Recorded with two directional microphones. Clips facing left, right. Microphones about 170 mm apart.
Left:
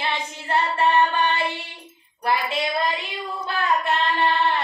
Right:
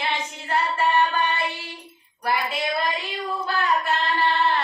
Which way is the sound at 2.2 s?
20° left (ahead or behind).